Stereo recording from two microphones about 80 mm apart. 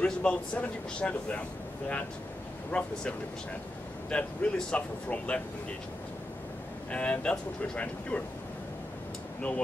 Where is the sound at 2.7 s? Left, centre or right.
Centre.